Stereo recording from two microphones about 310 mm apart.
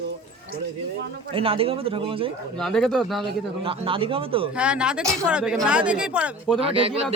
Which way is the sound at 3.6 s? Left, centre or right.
Centre.